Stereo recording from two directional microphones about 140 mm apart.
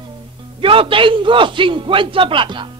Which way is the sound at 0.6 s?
40° right (ahead or behind).